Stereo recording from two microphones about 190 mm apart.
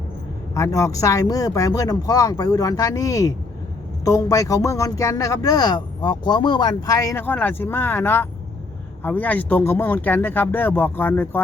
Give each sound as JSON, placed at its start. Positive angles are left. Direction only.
{"t": 0.5, "sound": "speech", "side_deg": 15}